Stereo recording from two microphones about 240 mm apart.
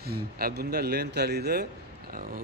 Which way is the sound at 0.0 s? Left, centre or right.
Right.